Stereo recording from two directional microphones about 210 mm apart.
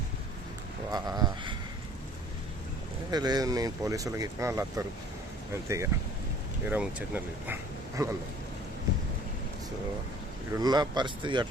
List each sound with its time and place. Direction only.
0.9 s a sound: 20° right (ahead or behind)
3.1 s speech: 20° right (ahead or behind)
5.6 s speech: 15° right (ahead or behind)
10.5 s speech: 20° right (ahead or behind)